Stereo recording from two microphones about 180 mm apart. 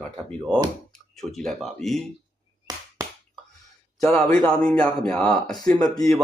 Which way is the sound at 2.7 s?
20° right (ahead or behind).